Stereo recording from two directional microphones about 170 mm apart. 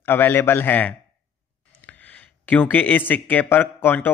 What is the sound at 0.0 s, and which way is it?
A man's voice, 10° left (ahead or behind).